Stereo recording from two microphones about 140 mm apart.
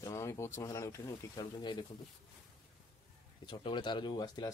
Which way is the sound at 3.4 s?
35° left (ahead or behind).